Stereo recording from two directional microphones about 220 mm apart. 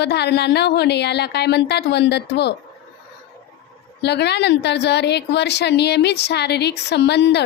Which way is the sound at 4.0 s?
50° left (ahead or behind).